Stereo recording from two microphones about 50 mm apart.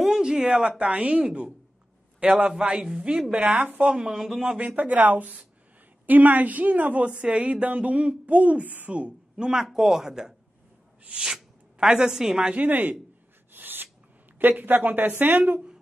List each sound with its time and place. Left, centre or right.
0.0 s a woman's voice: centre; by 3.9 s right
3.9 s speech: centre
4.6 s a woman's voice: right
8.9 s speech: right
12.5 s speech: right
13.5 s a sound: right
14.6 s speech: right